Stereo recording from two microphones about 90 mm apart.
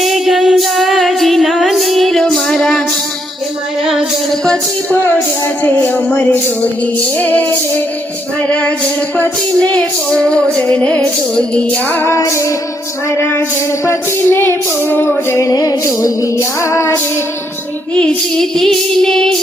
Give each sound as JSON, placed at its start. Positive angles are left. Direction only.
{"t": 0.0, "sound": "music", "side_deg": 0}
{"t": 3.8, "sound": "music", "side_deg": -5}
{"t": 4.4, "sound": "music", "side_deg": 10}
{"t": 5.6, "sound": "speech", "side_deg": 15}
{"t": 8.4, "sound": "music", "side_deg": 10}
{"t": 9.1, "sound": "speech", "side_deg": 20}
{"t": 10.1, "sound": "music", "side_deg": 10}
{"t": 12.1, "sound": "female singing", "side_deg": 35}
{"t": 13.1, "sound": "speech", "side_deg": 25}
{"t": 13.8, "sound": "female singing", "side_deg": 25}
{"t": 17.9, "sound": "music", "side_deg": 10}